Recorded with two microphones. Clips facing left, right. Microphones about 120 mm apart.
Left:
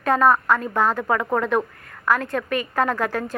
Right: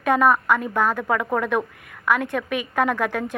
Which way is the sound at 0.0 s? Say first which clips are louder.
Even; 10° right (ahead or behind).